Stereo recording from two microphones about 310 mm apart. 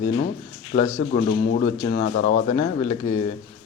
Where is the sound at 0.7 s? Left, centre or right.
Left.